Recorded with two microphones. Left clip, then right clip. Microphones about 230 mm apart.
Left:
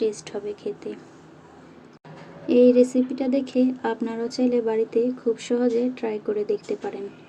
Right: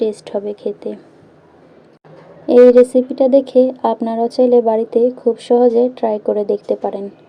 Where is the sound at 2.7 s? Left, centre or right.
Right.